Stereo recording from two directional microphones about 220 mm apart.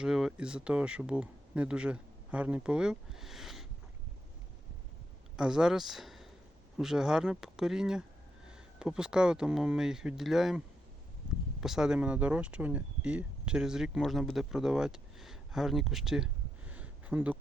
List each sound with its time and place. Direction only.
0.0 s speech: 5° right (ahead or behind)
5.4 s speech: 5° right (ahead or behind)
11.6 s speech: centre (ahead or behind)